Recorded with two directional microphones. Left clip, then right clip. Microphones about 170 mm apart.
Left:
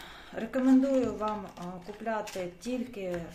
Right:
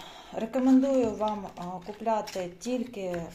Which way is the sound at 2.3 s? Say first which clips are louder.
Right 3 dB; 15° right (ahead or behind).